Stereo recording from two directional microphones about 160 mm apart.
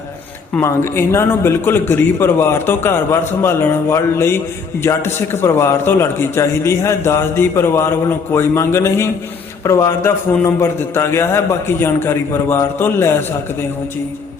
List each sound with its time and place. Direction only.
0.5 s a man's voice: 15° left (ahead or behind)